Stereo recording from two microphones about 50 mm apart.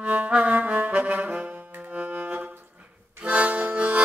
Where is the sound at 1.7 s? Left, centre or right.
Right.